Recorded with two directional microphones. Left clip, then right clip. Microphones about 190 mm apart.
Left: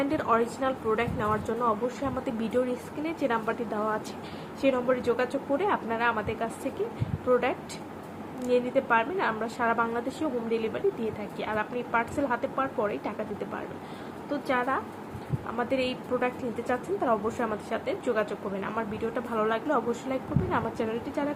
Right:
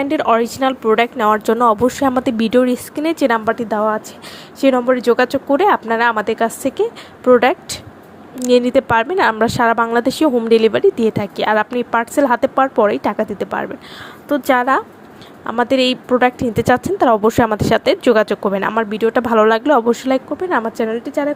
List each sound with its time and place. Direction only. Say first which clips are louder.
0.0 s a woman's voice: right 11 dB; 40° right (ahead or behind)